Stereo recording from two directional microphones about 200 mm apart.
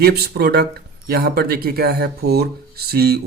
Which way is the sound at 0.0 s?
50° right (ahead or behind).